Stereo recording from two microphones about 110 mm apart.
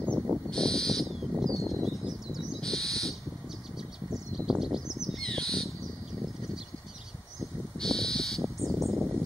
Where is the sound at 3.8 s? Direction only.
5° right (ahead or behind).